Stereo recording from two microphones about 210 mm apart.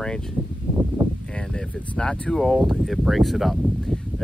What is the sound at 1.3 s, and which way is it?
Speech, 5° left (ahead or behind).